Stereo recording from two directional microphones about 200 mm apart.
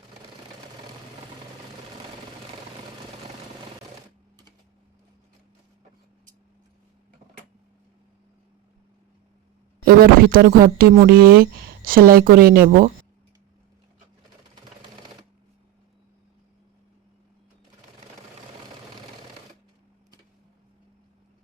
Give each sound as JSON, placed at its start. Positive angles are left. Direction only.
{"t": 9.8, "sound": "a woman's voice", "side_deg": -50}